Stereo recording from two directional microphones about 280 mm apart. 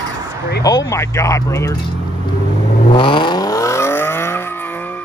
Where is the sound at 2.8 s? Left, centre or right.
Centre.